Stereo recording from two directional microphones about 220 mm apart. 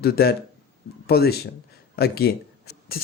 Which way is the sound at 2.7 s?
45° left (ahead or behind).